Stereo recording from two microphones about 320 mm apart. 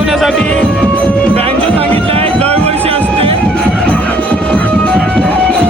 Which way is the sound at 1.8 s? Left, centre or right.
Centre.